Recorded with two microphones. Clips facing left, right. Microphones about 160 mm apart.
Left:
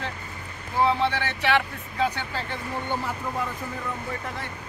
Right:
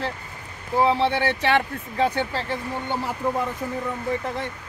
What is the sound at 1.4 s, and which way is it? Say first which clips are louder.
A man's voice: right 2 dB; 35° right (ahead or behind).